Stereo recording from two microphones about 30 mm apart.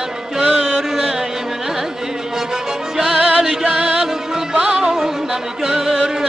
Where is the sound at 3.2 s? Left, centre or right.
Right.